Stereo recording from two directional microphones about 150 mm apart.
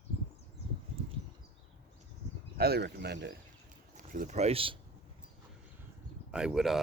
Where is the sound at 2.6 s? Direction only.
90° right.